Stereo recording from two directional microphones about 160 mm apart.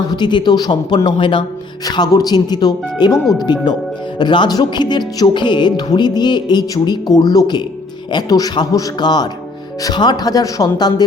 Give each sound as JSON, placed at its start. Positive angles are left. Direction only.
{"t": 0.1, "sound": "speech", "side_deg": 30}